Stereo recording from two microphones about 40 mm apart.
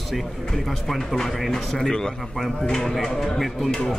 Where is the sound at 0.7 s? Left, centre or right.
Centre.